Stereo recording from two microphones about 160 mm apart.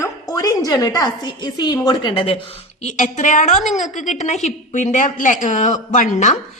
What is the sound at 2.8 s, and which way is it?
Speech, 45° left (ahead or behind).